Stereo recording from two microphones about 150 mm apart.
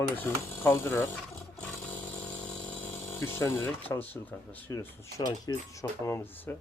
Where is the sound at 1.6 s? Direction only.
10° left (ahead or behind).